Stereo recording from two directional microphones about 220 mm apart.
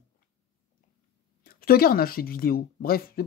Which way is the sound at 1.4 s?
40° left (ahead or behind).